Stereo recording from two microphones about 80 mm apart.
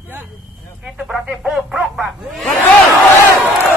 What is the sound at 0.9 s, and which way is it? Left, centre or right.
Speech, centre.